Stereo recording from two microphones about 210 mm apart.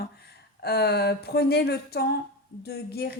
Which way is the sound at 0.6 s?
50° left (ahead or behind).